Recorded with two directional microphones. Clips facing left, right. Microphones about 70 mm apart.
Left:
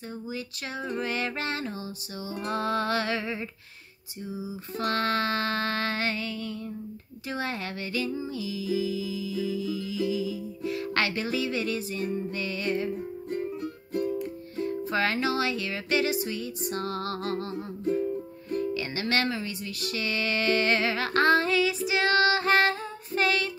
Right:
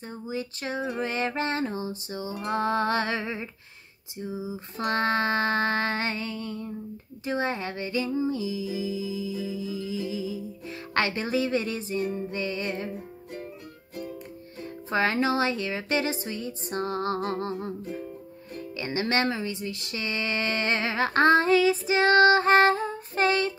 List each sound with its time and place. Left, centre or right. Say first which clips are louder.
0.1 s music: right 4 dB; right
14.6 s music: even; right